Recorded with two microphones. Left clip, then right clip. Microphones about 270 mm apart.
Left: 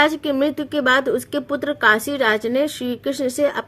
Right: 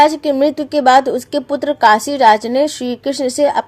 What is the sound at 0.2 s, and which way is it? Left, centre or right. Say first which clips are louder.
Speech: right 6 dB; centre.